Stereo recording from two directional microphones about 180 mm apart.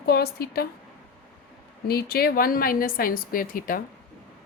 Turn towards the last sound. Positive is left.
turn(degrees=50)  # may be behind; listen again after turning